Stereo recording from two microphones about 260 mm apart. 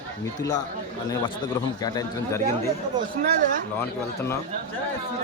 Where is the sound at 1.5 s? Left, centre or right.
Centre.